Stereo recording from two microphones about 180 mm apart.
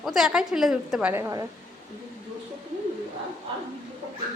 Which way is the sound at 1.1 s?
15° right (ahead or behind).